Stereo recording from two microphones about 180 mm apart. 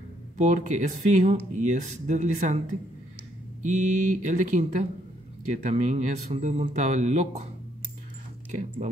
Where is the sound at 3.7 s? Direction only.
45° right (ahead or behind).